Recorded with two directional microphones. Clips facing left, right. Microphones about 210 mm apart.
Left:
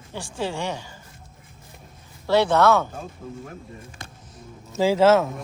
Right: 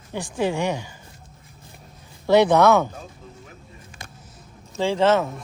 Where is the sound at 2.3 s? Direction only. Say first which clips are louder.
Right 3 dB; 15° right (ahead or behind).